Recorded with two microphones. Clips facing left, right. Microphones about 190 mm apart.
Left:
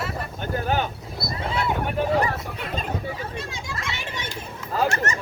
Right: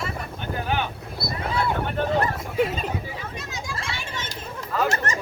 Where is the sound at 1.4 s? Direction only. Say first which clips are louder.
Right 1 dB; 25° left (ahead or behind).